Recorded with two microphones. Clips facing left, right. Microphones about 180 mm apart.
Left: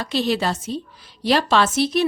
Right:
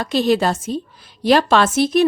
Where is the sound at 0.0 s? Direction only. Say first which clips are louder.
Right 5 dB; 45° right (ahead or behind).